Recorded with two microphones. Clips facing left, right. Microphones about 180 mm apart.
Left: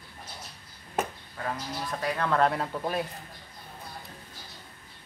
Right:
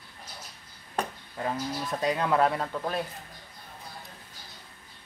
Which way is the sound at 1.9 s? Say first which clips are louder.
Right 2 dB; 20° right (ahead or behind).